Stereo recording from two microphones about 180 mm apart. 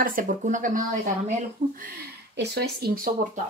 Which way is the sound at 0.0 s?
50° right (ahead or behind).